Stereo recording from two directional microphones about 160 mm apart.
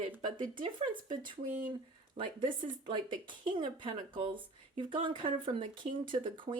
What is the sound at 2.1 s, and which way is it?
Speech, 30° right (ahead or behind).